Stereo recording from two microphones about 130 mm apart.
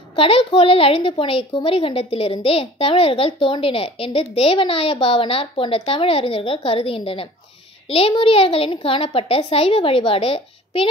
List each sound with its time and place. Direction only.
0.1 s a woman's voice: 45° left (ahead or behind)